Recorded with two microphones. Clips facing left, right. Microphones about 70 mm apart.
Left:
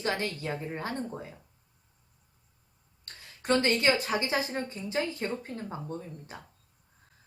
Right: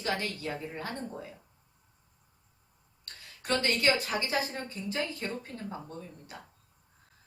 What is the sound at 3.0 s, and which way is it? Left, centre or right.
A woman's voice, left.